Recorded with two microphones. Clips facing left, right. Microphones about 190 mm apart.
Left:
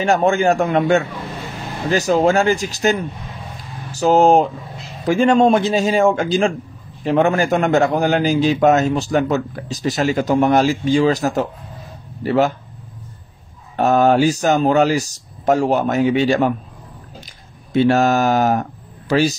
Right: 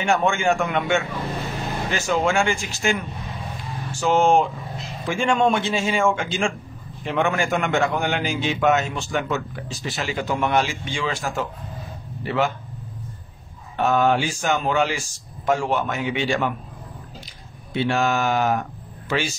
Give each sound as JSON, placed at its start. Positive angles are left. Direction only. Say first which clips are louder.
{"t": 0.0, "sound": "a man's voice", "louder": "left 5 dB", "side_deg": 35}
{"t": 13.7, "sound": "a man's voice", "louder": "left 6 dB", "side_deg": 40}
{"t": 17.7, "sound": "speech", "louder": "left 7 dB", "side_deg": 40}